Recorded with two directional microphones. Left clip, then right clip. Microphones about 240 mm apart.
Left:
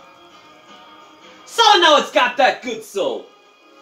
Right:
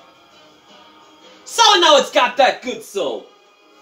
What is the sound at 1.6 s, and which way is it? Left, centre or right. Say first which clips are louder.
A woman's voice: right 1 dB; right.